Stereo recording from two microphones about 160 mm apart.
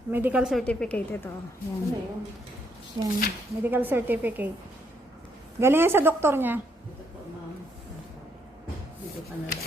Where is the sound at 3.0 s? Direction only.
25° right (ahead or behind).